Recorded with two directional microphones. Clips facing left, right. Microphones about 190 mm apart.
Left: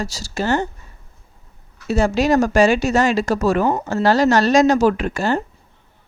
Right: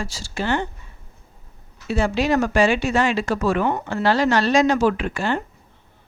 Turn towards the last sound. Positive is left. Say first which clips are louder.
# left 3 dB
turn(degrees=40)  # may be behind; listen again after turning